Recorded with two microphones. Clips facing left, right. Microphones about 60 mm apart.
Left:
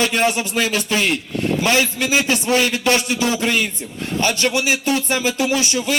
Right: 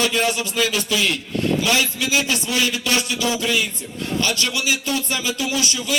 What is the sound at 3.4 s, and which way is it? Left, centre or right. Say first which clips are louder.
Speech: left 2 dB; left.